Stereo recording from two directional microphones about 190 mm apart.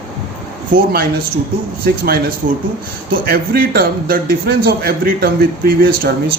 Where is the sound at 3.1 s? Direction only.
55° right (ahead or behind).